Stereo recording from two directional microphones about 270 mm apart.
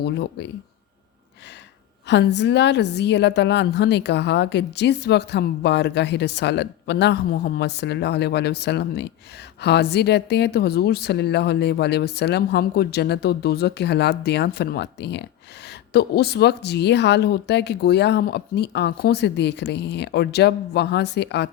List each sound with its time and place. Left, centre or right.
0.0 s a woman's voice: left
2.0 s a woman's voice: left